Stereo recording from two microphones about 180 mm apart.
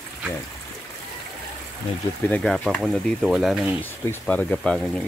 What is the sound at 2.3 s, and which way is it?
Speech, 5° left (ahead or behind).